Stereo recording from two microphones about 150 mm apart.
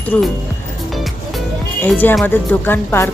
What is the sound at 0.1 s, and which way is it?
Speech, 10° left (ahead or behind).